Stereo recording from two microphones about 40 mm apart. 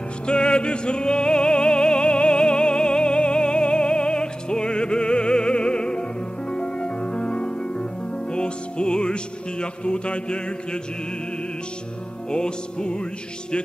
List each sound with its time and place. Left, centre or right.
0.3 s music: left
12.3 s music: left